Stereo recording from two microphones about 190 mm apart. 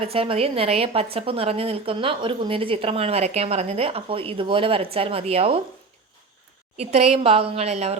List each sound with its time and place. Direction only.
0.0 s a woman's voice: 30° right (ahead or behind)
6.7 s a woman's voice: 35° right (ahead or behind)